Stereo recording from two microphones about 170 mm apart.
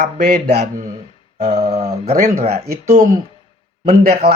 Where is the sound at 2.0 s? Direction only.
50° right (ahead or behind).